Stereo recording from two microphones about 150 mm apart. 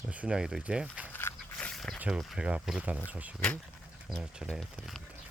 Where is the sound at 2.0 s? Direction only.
5° right (ahead or behind).